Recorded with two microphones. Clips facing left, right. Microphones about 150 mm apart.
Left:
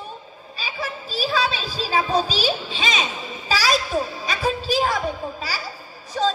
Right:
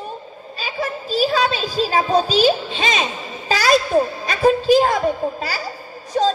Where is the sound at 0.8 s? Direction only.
50° right (ahead or behind).